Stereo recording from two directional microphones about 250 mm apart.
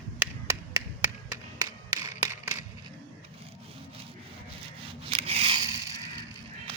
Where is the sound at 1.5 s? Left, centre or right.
Centre.